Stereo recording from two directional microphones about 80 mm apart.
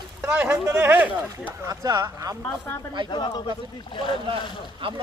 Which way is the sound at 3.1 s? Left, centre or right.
Left.